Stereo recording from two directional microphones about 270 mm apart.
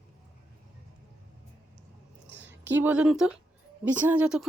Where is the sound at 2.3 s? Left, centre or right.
Right.